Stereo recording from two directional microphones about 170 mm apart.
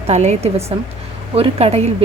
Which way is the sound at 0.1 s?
40° right (ahead or behind).